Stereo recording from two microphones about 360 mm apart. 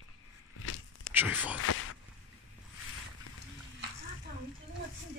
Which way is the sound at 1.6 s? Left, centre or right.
Left.